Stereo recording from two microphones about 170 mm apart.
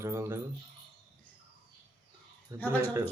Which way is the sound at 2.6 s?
10° left (ahead or behind).